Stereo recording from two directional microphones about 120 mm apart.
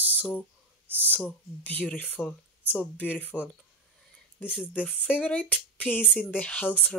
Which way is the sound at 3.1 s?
15° right (ahead or behind).